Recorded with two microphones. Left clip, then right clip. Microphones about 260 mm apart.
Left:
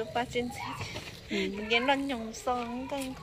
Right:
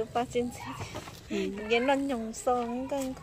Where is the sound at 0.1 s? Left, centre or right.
Right.